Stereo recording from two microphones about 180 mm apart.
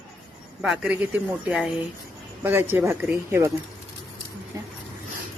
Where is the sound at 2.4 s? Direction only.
10° right (ahead or behind).